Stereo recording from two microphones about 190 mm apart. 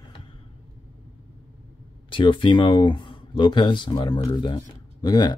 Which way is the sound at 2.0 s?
25° left (ahead or behind).